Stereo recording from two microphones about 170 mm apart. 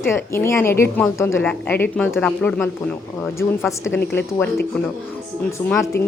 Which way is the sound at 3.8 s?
90° left.